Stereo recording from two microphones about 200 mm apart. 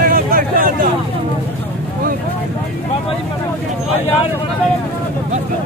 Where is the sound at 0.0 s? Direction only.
45° right (ahead or behind).